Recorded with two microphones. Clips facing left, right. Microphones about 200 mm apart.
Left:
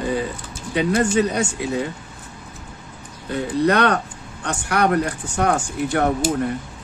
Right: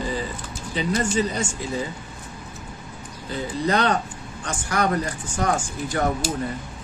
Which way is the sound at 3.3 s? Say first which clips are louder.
Left 5 dB; 65° left (ahead or behind).